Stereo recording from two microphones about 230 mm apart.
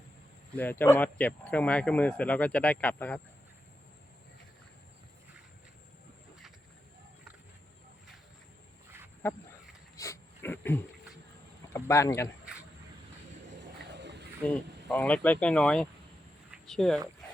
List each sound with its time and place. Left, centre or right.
0.5 s speech: centre
9.2 s speech: centre
10.0 s a sound: centre
11.7 s speech: centre
13.9 s a sound: right
14.4 s speech: centre